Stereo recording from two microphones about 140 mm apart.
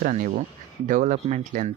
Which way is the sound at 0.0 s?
65° right (ahead or behind).